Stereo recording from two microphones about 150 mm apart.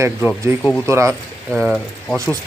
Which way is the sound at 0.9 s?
20° right (ahead or behind).